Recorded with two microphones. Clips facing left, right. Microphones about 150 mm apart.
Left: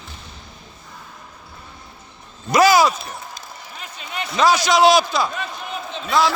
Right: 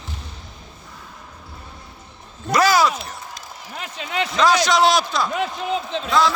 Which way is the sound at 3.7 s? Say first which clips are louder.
Right 6 dB; 90° right.